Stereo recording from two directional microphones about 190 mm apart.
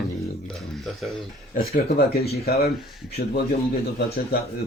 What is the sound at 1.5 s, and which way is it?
Speech, 50° left (ahead or behind).